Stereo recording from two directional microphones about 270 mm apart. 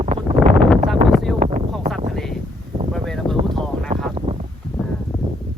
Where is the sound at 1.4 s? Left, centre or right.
Right.